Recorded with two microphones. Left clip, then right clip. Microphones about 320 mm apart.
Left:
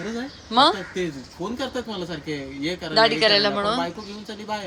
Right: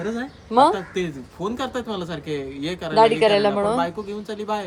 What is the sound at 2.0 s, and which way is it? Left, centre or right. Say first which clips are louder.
Speech: right 2 dB; centre.